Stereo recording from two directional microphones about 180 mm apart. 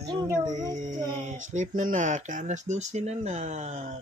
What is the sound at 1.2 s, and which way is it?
Speech, 45° right (ahead or behind).